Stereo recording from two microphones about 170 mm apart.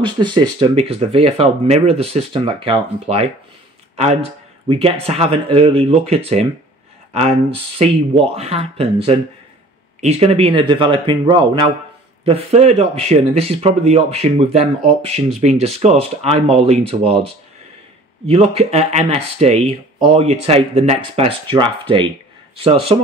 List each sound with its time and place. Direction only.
0.0 s speech: 25° right (ahead or behind)
3.9 s a sound: 40° right (ahead or behind)
4.6 s speech: 35° right (ahead or behind)
18.2 s speech: 35° right (ahead or behind)